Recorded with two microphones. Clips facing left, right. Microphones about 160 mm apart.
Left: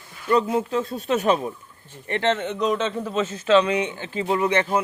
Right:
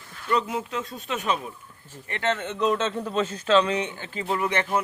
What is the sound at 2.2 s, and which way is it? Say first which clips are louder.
Speech: left 4 dB; 25° left (ahead or behind).